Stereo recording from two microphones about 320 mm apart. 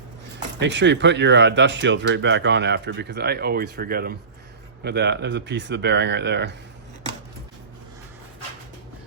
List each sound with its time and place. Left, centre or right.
0.3 s speech: right